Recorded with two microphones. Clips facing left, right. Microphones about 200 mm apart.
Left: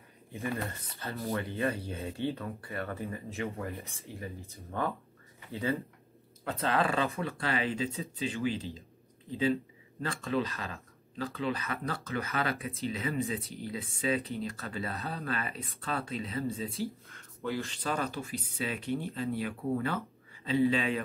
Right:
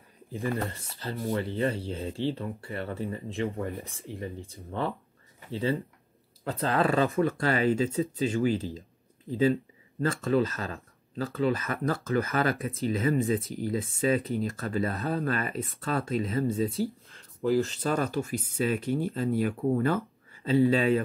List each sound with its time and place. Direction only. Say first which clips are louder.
0.3 s speech: right 4 dB; 30° right (ahead or behind); by 16.6 s 45° right (ahead or behind)
17.1 s speech: right 9 dB; 35° right (ahead or behind)